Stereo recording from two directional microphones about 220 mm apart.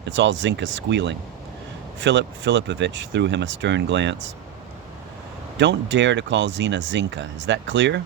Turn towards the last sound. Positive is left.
turn(degrees=-55)  # may be behind; listen again after turning